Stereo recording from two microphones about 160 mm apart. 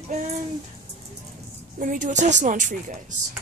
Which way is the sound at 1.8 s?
55° right (ahead or behind).